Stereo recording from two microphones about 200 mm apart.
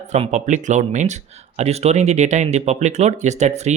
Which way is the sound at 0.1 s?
35° right (ahead or behind).